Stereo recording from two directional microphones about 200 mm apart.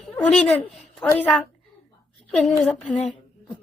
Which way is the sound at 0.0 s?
5° left (ahead or behind).